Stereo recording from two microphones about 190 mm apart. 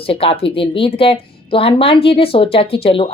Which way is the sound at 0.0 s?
30° left (ahead or behind).